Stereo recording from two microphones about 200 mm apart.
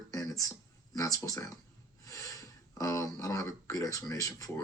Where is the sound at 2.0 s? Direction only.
15° left (ahead or behind).